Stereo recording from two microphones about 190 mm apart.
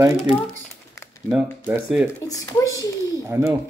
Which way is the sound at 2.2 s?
20° left (ahead or behind).